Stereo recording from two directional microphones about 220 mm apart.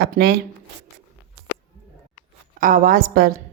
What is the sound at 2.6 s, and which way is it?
Speech, 40° right (ahead or behind).